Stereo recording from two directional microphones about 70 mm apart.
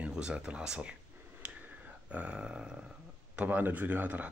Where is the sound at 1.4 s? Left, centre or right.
Centre.